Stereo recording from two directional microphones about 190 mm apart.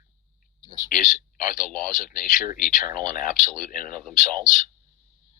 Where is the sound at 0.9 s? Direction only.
45° left (ahead or behind).